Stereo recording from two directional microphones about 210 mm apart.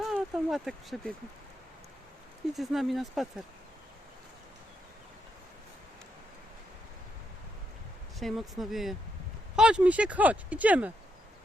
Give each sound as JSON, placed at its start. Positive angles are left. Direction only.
{"t": 0.0, "sound": "speech", "side_deg": 0}
{"t": 2.5, "sound": "speech", "side_deg": 0}
{"t": 8.2, "sound": "speech", "side_deg": 0}